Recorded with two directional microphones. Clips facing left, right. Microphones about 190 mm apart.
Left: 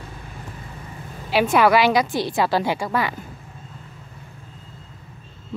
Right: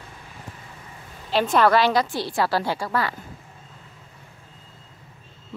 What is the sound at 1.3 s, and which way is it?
Speech, 10° left (ahead or behind).